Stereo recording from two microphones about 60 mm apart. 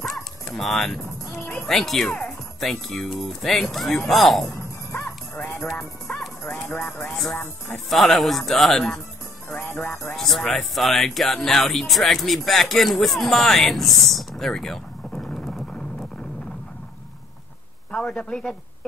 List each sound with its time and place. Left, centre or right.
0.0 s dog: centre
1.6 s speech: centre
5.7 s music: centre
6.4 s music: left
7.1 s music: centre
7.7 s speech: centre
10.1 s speech: centre
17.9 s a man's voice: centre